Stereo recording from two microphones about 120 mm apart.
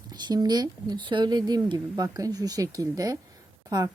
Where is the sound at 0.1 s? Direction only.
35° right (ahead or behind).